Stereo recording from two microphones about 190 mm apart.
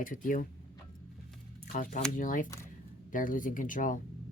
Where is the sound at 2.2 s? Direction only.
45° left (ahead or behind).